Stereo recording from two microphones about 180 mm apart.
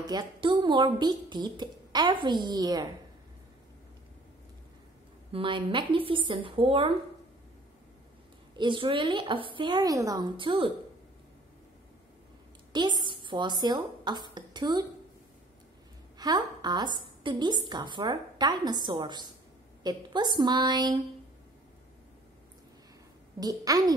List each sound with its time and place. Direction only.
0.0 s speech: 25° right (ahead or behind)
5.3 s speech: 30° right (ahead or behind)
8.5 s speech: 25° right (ahead or behind)
12.7 s speech: 25° right (ahead or behind)
16.2 s a woman's voice: 25° right (ahead or behind)
23.4 s speech: 20° right (ahead or behind)